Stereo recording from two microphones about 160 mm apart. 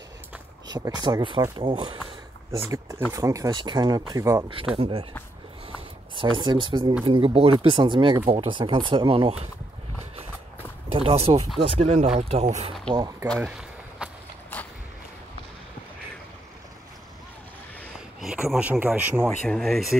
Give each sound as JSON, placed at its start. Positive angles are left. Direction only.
{"t": 0.7, "sound": "speech", "side_deg": -25}
{"t": 3.1, "sound": "speech", "side_deg": -20}
{"t": 4.7, "sound": "speech", "side_deg": -35}
{"t": 6.1, "sound": "speech", "side_deg": -30}
{"t": 10.9, "sound": "speech", "side_deg": -35}
{"t": 12.9, "sound": "speech", "side_deg": -25}
{"t": 13.4, "sound": "a sound", "side_deg": -5}
{"t": 14.5, "sound": "a sound", "side_deg": 10}
{"t": 18.2, "sound": "speech", "side_deg": -5}
{"t": 19.2, "sound": "speech", "side_deg": 5}